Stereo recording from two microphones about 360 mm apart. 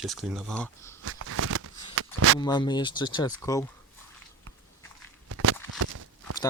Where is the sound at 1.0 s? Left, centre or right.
Right.